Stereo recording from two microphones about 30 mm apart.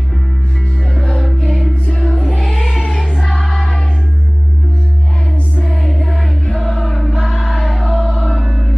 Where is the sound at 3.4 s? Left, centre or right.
Left.